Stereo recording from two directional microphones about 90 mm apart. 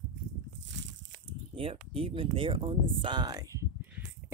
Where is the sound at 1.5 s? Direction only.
90° right; by 3.7 s 40° right (ahead or behind).